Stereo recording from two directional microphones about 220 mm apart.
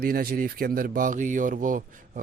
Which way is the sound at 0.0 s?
45° right (ahead or behind).